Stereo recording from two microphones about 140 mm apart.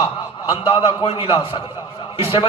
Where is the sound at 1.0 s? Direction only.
40° left (ahead or behind).